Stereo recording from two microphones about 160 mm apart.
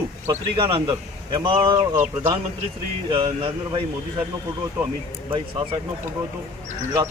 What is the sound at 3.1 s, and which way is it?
Speech, 35° right (ahead or behind).